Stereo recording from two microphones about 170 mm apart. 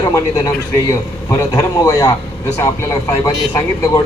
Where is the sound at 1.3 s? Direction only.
20° left (ahead or behind).